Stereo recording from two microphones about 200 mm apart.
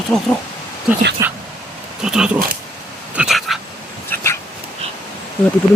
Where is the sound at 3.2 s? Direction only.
Centre (ahead or behind).